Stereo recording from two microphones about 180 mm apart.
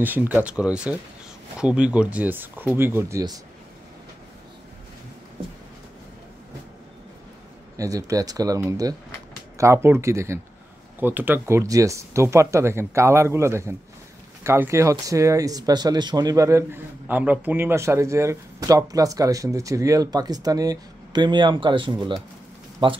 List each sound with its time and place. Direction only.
0.0 s speech: 10° right (ahead or behind)
7.7 s speech: 20° right (ahead or behind)